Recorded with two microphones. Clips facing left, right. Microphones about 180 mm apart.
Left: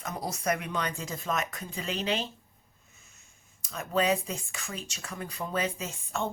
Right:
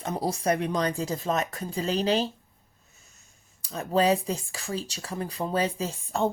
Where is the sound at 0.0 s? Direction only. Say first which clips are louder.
Right 5 dB; 30° right (ahead or behind).